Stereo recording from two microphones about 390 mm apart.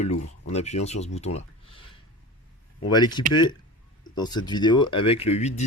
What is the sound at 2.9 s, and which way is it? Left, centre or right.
Speech, centre.